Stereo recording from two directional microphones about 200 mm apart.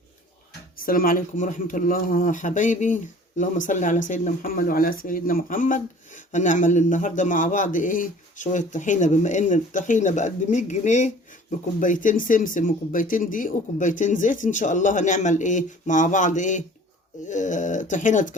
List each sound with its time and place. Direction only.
0.8 s speech: 45° left (ahead or behind)